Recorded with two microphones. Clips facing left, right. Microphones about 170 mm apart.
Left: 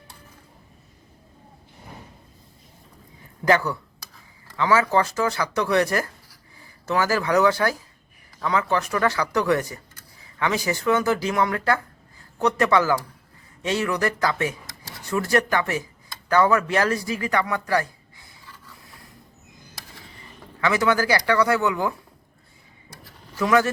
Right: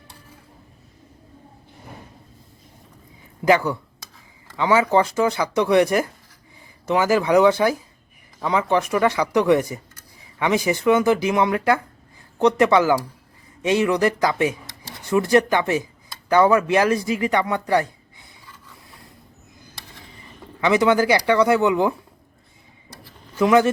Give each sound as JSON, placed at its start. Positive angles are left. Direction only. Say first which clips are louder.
{"t": 3.4, "sound": "speech", "louder": "right 3 dB", "side_deg": -15}
{"t": 20.6, "sound": "speech", "louder": "right 4 dB", "side_deg": -20}
{"t": 23.4, "sound": "speech", "louder": "right 4 dB", "side_deg": -20}